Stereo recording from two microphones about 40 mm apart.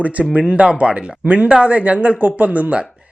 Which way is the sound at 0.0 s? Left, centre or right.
Right.